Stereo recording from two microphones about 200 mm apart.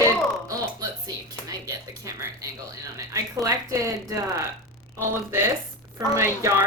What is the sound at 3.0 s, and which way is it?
Speech, 15° right (ahead or behind).